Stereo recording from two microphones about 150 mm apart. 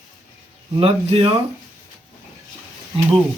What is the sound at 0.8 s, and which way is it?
Speech, 40° right (ahead or behind).